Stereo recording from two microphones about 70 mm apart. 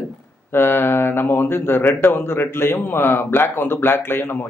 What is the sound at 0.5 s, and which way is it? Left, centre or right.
Speech, left.